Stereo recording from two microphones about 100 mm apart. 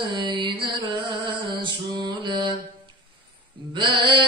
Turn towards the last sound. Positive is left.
turn(degrees=-50)  # may be behind; listen again after turning